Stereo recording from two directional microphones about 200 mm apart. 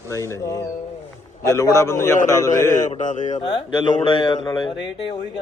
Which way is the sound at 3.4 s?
20° left (ahead or behind).